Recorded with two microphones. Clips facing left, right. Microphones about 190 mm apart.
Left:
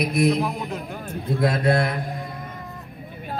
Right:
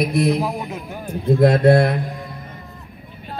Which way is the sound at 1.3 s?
55° right (ahead or behind).